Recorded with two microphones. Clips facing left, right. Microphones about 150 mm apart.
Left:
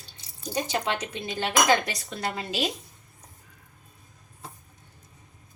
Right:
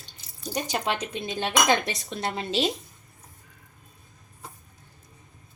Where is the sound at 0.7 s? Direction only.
15° right (ahead or behind).